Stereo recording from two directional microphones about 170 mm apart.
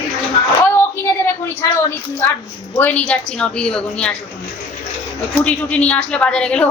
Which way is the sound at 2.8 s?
10° left (ahead or behind).